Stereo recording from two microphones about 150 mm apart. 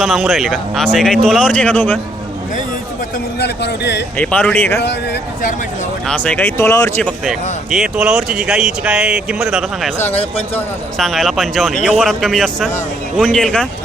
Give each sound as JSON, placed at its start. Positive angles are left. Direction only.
{"t": 0.0, "sound": "speech", "side_deg": 0}
{"t": 4.2, "sound": "speech", "side_deg": 10}
{"t": 6.1, "sound": "speech", "side_deg": 10}
{"t": 7.0, "sound": "speech", "side_deg": 0}
{"t": 10.9, "sound": "speech", "side_deg": 0}